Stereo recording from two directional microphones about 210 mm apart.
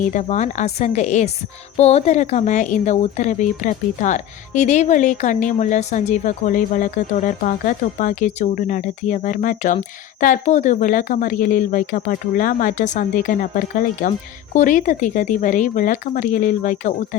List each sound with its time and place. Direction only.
0.1 s a woman's voice: 35° left (ahead or behind)